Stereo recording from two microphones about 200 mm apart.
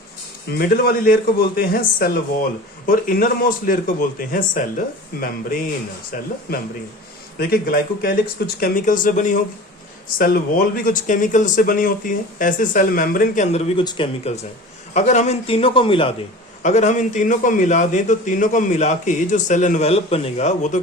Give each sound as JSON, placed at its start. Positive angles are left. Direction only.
{"t": 0.6, "sound": "a man's voice", "side_deg": 50}
{"t": 14.9, "sound": "a man's voice", "side_deg": 35}